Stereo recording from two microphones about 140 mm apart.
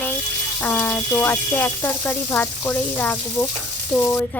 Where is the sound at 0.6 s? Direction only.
10° left (ahead or behind).